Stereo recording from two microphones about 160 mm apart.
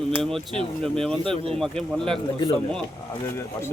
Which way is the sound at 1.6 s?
5° left (ahead or behind).